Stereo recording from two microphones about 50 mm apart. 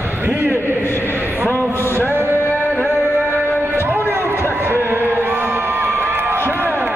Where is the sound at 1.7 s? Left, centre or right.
Left.